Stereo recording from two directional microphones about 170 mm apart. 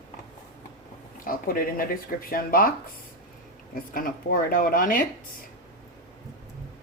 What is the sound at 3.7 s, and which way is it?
Speech, 55° left (ahead or behind).